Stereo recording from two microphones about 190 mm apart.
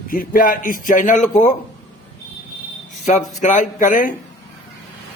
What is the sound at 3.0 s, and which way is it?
Speech, 40° left (ahead or behind).